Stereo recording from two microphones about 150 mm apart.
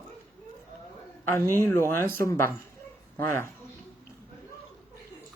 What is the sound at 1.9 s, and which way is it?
Speech, 15° left (ahead or behind).